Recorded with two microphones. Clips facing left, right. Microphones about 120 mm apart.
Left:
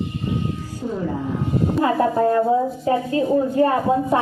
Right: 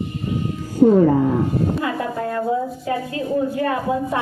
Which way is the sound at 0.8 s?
65° right (ahead or behind).